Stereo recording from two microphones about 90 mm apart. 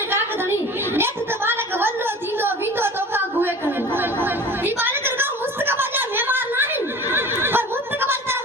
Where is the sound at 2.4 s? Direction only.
25° right (ahead or behind).